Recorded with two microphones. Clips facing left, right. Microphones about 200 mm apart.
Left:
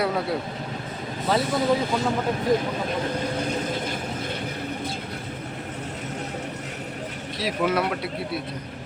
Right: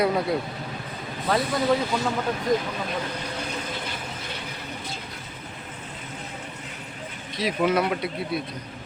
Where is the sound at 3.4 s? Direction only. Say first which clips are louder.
Left 6 dB; 50° left (ahead or behind).